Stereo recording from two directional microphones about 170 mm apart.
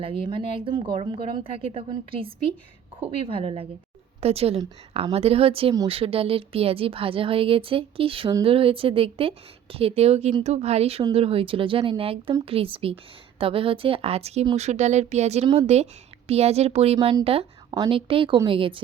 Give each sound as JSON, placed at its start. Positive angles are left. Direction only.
{"t": 0.0, "sound": "a woman's voice", "side_deg": -30}